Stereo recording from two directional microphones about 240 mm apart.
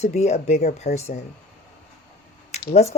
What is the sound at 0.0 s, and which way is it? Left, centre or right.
Speech, left.